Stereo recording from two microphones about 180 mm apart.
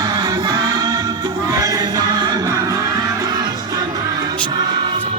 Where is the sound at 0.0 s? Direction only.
20° right (ahead or behind).